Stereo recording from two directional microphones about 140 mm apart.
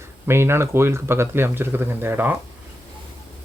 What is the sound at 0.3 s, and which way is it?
A man's voice, 20° right (ahead or behind).